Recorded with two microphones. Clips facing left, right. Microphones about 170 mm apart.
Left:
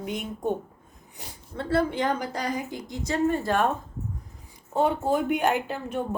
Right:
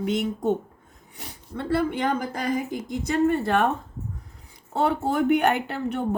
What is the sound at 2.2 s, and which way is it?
A woman's voice, 50° right (ahead or behind).